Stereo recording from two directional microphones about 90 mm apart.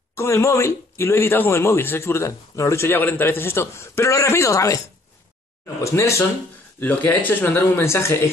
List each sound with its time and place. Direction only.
0.1 s speech: 30° left (ahead or behind)
5.9 s speech: 35° left (ahead or behind)
6.8 s speech: 20° left (ahead or behind)